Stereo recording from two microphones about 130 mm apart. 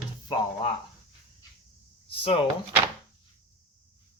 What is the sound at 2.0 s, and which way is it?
Speech, 45° left (ahead or behind).